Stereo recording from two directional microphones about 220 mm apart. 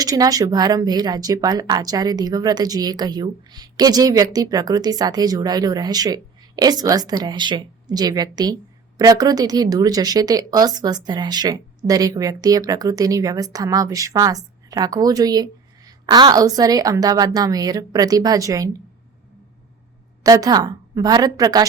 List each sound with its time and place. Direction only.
0.0 s a woman's voice: 15° right (ahead or behind)
20.2 s a woman's voice: 15° right (ahead or behind)